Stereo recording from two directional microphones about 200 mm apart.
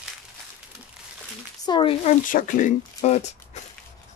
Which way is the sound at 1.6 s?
25° left (ahead or behind).